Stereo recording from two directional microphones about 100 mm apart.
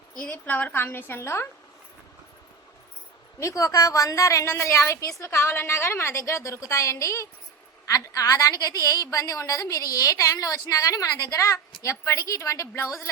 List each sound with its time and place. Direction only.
0.1 s a woman's voice: 15° left (ahead or behind)
3.4 s a woman's voice: 35° left (ahead or behind)